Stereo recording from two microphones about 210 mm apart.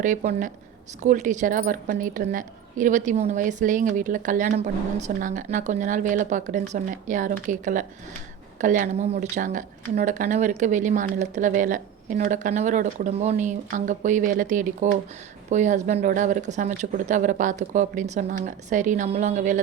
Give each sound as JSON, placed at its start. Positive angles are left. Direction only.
{"t": 0.0, "sound": "speech", "side_deg": -35}